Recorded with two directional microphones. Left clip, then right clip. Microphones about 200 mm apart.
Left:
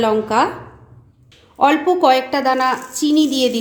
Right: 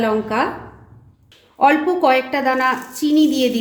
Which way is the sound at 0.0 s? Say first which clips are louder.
Left 3 dB; 20° left (ahead or behind).